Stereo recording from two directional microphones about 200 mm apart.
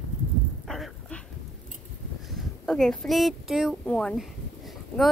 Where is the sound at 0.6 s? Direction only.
Centre (ahead or behind).